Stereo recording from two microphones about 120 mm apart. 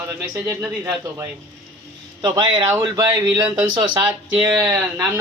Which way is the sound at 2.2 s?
40° right (ahead or behind).